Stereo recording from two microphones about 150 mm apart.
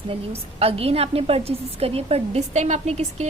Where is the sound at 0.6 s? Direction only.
40° right (ahead or behind).